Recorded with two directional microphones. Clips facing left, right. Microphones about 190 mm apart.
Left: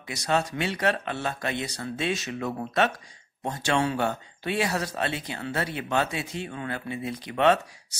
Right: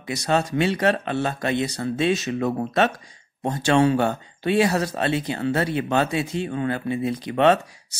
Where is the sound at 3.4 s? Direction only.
40° right (ahead or behind).